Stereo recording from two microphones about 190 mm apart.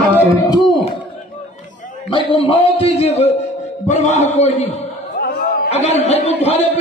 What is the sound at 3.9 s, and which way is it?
Speech, 35° left (ahead or behind).